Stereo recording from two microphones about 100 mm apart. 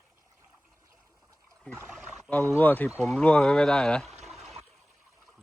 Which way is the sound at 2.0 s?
10° right (ahead or behind).